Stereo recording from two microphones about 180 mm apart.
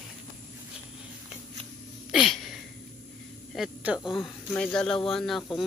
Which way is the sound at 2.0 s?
Centre (ahead or behind).